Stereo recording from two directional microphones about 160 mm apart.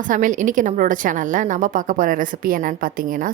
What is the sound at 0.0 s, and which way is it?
A woman's voice, 55° right (ahead or behind).